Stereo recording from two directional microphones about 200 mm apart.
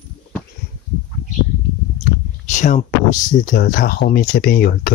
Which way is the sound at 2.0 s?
35° left (ahead or behind).